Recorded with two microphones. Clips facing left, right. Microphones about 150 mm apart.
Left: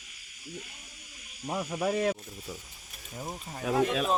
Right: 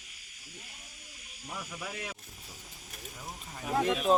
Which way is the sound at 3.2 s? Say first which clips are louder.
Left 8 dB; 40° left (ahead or behind).